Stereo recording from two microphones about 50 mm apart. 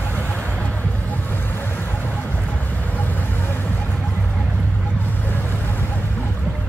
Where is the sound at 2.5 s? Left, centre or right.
Left.